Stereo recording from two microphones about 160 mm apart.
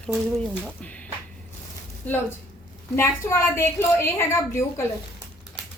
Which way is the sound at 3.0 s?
15° left (ahead or behind).